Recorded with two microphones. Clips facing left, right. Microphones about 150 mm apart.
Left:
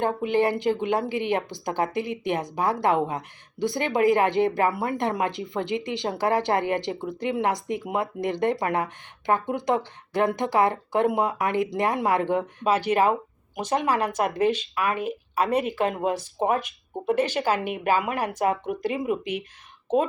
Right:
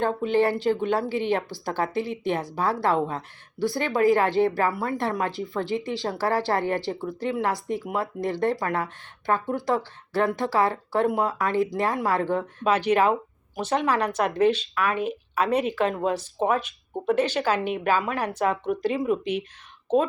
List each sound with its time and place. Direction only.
0.0 s speech: 15° left (ahead or behind)